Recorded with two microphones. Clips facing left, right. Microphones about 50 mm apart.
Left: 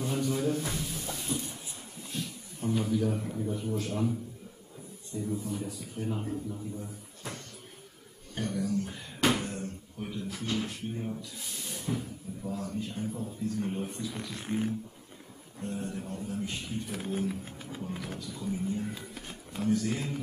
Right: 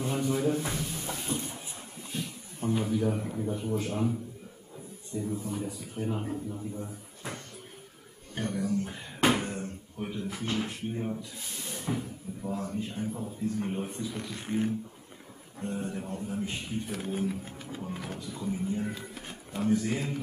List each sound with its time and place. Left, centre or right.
0.0 s a sound: centre
2.1 s speech: centre
5.1 s speech: centre
8.4 s a sound: right
11.9 s speech: centre
14.1 s speech: centre
15.6 s speech: centre
16.9 s speech: centre
17.8 s speech: centre
18.9 s speech: centre